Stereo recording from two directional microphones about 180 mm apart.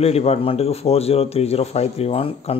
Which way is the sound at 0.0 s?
35° left (ahead or behind).